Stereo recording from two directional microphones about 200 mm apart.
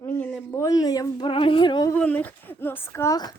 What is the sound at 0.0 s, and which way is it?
Speech, 10° left (ahead or behind).